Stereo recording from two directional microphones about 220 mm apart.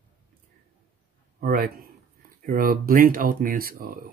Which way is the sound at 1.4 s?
40° right (ahead or behind).